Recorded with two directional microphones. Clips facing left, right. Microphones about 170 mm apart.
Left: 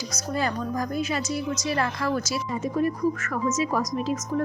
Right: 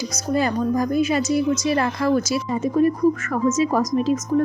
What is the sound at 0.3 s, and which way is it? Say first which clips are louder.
A woman's voice: right 7 dB; 15° right (ahead or behind).